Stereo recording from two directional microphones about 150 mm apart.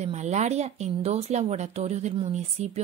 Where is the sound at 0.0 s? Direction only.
50° right (ahead or behind).